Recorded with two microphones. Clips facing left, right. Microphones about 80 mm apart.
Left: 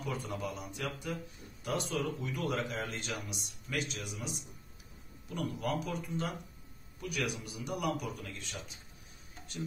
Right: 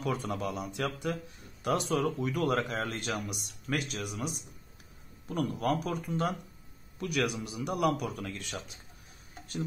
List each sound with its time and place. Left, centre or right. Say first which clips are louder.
0.0 s a man's voice: right 5 dB; right
1.6 s speech: right 6 dB; right
7.0 s a man's voice: right 6 dB; right